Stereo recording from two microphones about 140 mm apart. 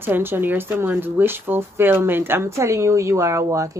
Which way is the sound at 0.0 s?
15° right (ahead or behind).